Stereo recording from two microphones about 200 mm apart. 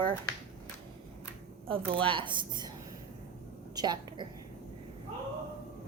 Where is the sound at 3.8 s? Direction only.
20° right (ahead or behind).